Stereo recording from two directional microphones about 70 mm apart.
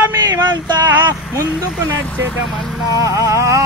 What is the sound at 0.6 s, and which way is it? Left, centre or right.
Speech, right.